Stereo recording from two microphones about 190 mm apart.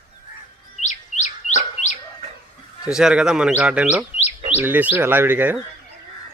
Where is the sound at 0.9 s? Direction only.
40° left (ahead or behind).